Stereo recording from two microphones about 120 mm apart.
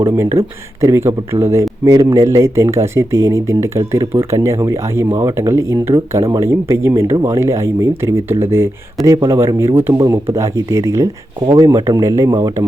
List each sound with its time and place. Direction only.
0.1 s speech: 20° right (ahead or behind)